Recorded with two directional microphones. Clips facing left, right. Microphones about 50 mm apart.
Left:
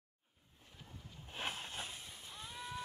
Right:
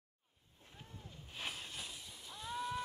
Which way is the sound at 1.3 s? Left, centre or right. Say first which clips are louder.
Left 3 dB; left.